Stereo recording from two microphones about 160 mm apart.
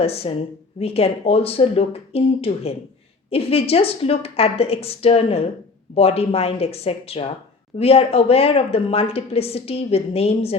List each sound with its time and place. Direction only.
0.0 s a woman's voice: 40° left (ahead or behind)